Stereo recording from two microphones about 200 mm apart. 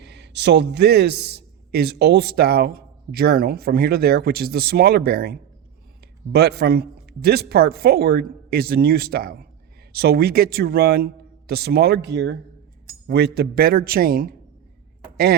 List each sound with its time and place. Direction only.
0.0 s a man's voice: 60° right (ahead or behind)